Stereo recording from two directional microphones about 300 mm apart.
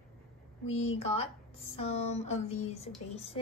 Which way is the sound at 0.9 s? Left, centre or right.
Centre.